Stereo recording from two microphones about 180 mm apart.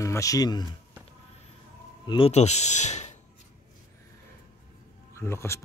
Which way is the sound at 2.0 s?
25° left (ahead or behind).